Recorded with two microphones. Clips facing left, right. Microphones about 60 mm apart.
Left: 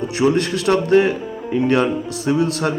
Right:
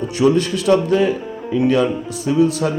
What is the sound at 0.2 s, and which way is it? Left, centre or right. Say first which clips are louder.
A man's voice: right 2 dB; left.